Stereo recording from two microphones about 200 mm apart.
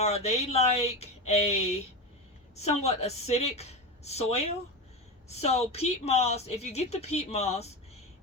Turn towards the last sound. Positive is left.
turn(degrees=30)  # may be behind; listen again after turning